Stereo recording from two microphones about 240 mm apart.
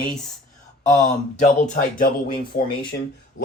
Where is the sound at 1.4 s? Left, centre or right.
Left.